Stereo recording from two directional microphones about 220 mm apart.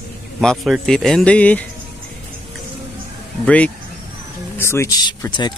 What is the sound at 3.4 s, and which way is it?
Speech, 5° left (ahead or behind).